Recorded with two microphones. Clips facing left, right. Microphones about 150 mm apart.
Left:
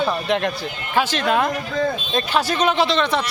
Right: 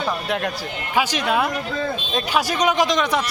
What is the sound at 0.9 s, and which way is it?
Speech, 10° right (ahead or behind).